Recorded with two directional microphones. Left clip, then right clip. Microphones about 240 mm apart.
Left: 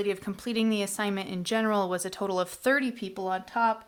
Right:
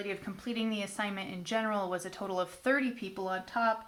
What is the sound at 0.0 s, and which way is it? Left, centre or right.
A woman's voice, left.